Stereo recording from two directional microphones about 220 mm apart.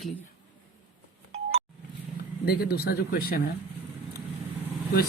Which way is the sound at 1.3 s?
25° right (ahead or behind).